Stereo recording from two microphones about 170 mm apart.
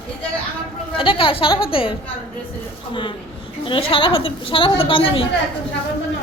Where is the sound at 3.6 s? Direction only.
30° left (ahead or behind).